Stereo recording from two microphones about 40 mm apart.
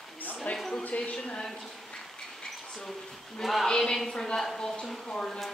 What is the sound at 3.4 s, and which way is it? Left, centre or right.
Speech, centre.